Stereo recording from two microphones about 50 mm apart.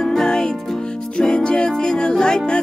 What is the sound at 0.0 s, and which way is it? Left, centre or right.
Music, centre.